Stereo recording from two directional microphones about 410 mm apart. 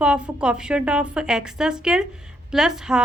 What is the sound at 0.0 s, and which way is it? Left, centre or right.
A woman's voice, centre.